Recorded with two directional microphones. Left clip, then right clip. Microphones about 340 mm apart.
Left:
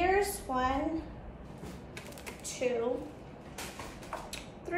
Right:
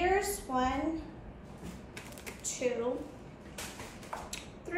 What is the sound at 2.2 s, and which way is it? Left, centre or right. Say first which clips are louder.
Typing: left 1 dB; centre.